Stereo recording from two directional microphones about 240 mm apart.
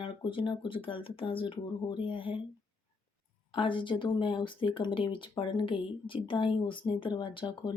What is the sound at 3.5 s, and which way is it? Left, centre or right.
Speech, left.